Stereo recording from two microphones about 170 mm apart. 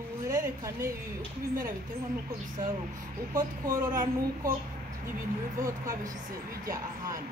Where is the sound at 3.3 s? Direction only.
50° right (ahead or behind).